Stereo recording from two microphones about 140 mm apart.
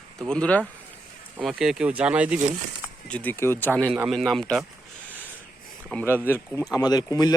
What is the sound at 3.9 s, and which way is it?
Speech, 5° right (ahead or behind).